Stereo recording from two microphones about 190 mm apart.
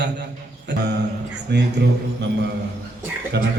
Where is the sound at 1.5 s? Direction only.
60° right (ahead or behind).